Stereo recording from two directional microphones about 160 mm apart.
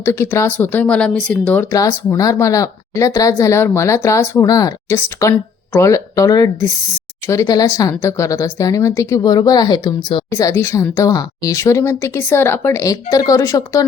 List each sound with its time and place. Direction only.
0.0 s speech: 15° left (ahead or behind)
1.7 s a woman's voice: 20° left (ahead or behind)
10.3 s a woman's voice: 15° left (ahead or behind)